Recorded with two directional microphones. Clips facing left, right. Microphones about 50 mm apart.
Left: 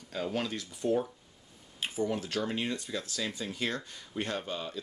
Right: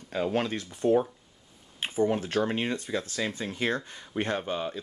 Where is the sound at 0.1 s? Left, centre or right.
Right.